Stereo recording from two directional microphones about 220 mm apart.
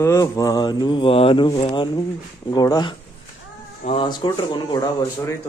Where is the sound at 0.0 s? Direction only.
15° left (ahead or behind).